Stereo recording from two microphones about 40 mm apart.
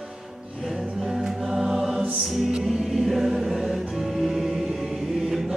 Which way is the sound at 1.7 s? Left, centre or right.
Centre.